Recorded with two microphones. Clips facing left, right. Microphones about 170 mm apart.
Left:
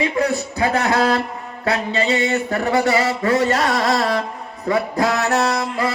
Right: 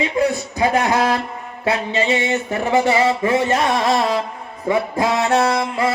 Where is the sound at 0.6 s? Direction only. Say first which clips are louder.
Right 1 dB; 20° right (ahead or behind).